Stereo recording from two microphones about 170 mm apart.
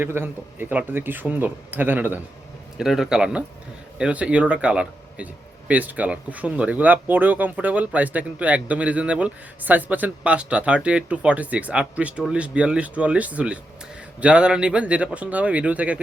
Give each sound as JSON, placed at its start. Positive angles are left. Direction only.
{"t": 0.0, "sound": "speech", "side_deg": -10}